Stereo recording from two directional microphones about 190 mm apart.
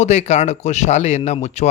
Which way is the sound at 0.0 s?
35° left (ahead or behind).